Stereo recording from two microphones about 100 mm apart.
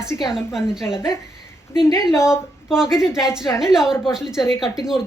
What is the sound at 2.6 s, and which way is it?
A woman's voice, 5° right (ahead or behind).